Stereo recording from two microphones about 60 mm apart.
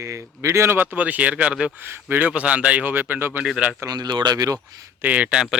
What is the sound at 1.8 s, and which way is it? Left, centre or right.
Speech, right.